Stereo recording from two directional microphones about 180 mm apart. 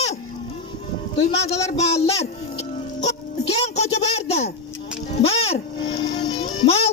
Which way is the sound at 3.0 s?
35° left (ahead or behind).